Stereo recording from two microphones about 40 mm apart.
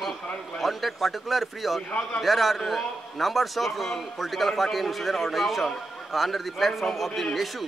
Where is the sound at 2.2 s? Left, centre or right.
Centre.